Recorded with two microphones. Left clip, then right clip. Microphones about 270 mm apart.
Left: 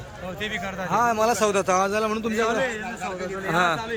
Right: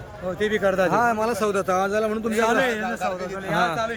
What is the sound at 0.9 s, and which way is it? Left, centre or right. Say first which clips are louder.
A man's voice: even; centre.